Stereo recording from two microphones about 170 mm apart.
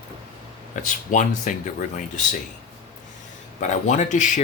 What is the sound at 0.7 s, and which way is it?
Speech, 50° left (ahead or behind).